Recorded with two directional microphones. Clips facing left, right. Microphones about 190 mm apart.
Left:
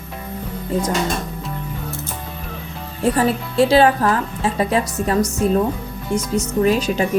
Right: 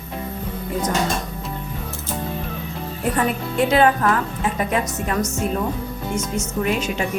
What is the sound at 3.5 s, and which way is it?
A woman's voice, 30° left (ahead or behind).